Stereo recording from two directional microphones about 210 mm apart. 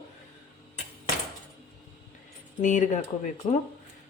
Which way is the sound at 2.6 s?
35° left (ahead or behind).